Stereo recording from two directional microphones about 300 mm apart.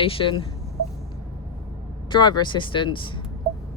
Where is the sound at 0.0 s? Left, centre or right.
Centre.